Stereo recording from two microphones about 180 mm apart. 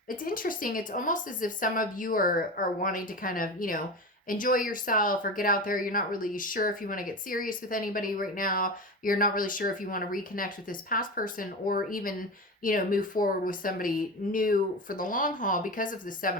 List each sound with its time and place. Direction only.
0.1 s speech: 50° left (ahead or behind)